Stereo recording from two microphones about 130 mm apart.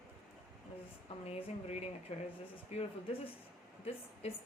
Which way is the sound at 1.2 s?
50° left (ahead or behind).